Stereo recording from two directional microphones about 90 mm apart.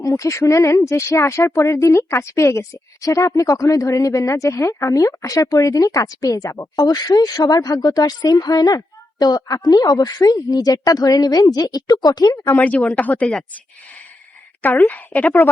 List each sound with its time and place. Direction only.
0.0 s a woman's voice: 40° left (ahead or behind)
12.5 s speech: 15° left (ahead or behind)
14.6 s a woman's voice: 20° left (ahead or behind)